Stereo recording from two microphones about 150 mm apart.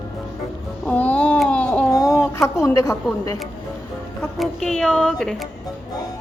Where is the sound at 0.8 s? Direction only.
10° left (ahead or behind).